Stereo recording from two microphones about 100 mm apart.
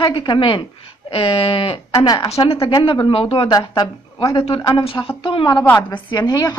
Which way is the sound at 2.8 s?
60° left (ahead or behind).